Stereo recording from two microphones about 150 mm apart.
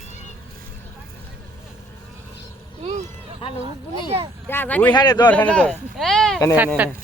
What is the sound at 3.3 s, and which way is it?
Speech, 40° left (ahead or behind).